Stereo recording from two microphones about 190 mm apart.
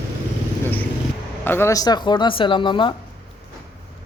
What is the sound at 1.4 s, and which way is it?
Speech, 10° left (ahead or behind).